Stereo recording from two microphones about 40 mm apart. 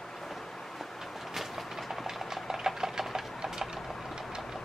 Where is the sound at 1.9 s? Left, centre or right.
Centre.